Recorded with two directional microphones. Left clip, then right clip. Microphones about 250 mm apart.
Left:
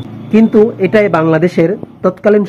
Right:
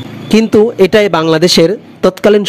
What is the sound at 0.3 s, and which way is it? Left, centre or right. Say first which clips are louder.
Speech: right 1 dB; right.